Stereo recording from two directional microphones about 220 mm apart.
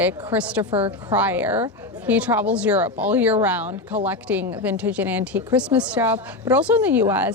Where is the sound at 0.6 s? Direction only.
25° right (ahead or behind).